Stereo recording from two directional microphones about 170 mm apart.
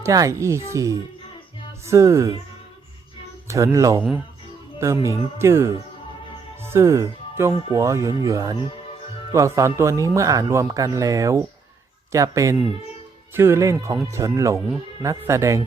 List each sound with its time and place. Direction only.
0.0 s a man's voice: 20° right (ahead or behind)
3.4 s a man's voice: 15° right (ahead or behind)